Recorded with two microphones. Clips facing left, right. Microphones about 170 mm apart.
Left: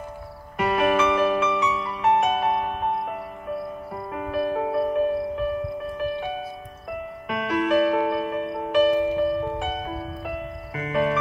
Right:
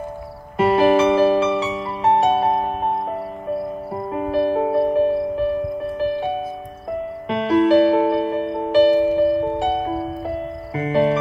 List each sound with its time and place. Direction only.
0.6 s music: 30° right (ahead or behind)